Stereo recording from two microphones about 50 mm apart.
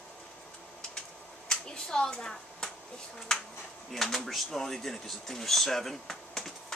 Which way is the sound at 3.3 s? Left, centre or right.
Centre.